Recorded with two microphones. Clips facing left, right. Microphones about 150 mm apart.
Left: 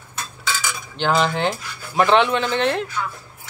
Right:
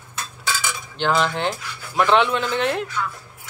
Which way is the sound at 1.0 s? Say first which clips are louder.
Left 1 dB; centre (ahead or behind).